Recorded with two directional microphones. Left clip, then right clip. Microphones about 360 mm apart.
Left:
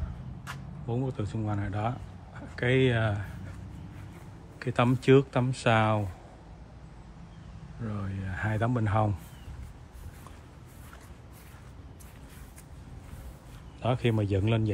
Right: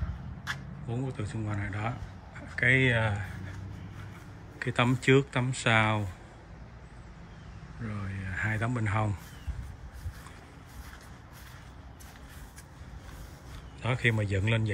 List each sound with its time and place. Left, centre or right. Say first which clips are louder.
0.8 s a man's voice: left 4 dB; centre
4.6 s a man's voice: left 1 dB; centre
7.8 s a man's voice: left 1 dB; centre
13.7 s a man's voice: even; centre